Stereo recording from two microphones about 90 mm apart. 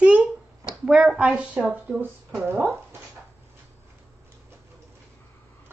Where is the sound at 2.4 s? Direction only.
30° right (ahead or behind).